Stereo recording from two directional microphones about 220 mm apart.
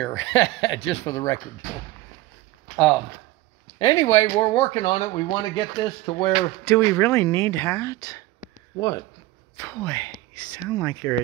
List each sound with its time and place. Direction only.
0.2 s speech: 60° left (ahead or behind)
1.1 s speech: 15° left (ahead or behind)
2.7 s speech: centre (ahead or behind)
3.7 s speech: 15° left (ahead or behind)
6.7 s speech: 10° left (ahead or behind)